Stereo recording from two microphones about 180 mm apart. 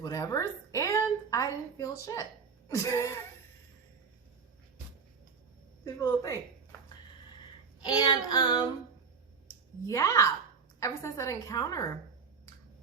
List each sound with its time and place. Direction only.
0.0 s a woman's voice: 20° left (ahead or behind)
5.8 s child singing: 20° left (ahead or behind)
7.8 s child singing: 25° left (ahead or behind)
9.8 s a woman's voice: 20° left (ahead or behind)